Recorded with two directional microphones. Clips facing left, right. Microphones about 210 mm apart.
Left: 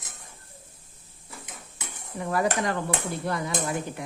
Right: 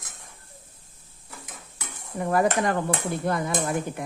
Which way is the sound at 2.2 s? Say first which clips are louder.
Right 3 dB; 50° right (ahead or behind).